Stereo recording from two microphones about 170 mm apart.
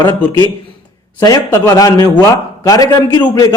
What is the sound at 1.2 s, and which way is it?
A man's voice, 20° left (ahead or behind).